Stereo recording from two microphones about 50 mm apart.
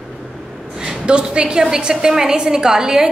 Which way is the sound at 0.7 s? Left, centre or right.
Centre.